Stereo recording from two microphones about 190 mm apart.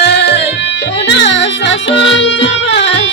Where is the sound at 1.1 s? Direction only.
70° left (ahead or behind).